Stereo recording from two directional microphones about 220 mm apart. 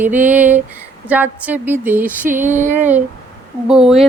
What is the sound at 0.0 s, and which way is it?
Speech, 10° right (ahead or behind).